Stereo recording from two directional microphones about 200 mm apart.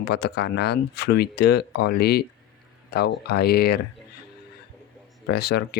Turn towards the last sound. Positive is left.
turn(degrees=55)  # may be behind; listen again after turning